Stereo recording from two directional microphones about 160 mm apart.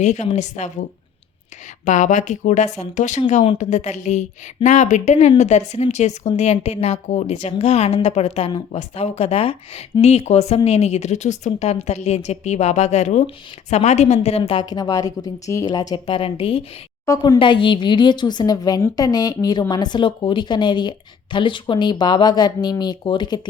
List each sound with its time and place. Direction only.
0.0 s a woman's voice: 45° left (ahead or behind)
14.6 s a woman's voice: 25° left (ahead or behind)
16.0 s a woman's voice: 35° left (ahead or behind)